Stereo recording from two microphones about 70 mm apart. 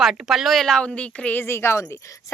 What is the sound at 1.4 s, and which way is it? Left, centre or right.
Speech, left.